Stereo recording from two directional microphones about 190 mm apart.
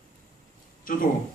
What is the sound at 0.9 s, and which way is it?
Speech, 45° left (ahead or behind).